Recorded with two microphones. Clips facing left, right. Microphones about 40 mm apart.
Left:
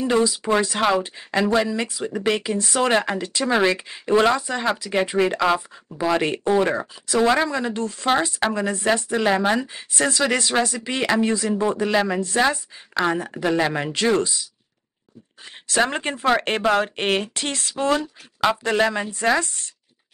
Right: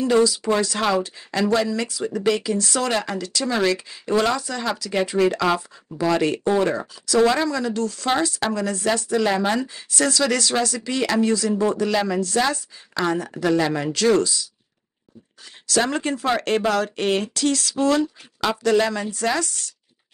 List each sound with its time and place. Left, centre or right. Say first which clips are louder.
0.0 s speech: right 2 dB; left
5.5 s speech: left 1 dB; centre; by 14.5 s left
15.6 s speech: even; left